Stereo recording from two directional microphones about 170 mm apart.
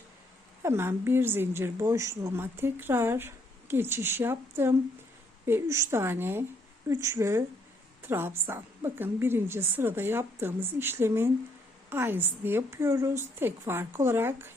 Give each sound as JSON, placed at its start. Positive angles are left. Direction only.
{"t": 0.6, "sound": "a woman's voice", "side_deg": -15}